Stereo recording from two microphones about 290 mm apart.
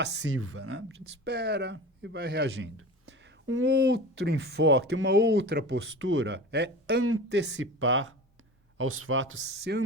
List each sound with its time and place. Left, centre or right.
0.0 s speech: right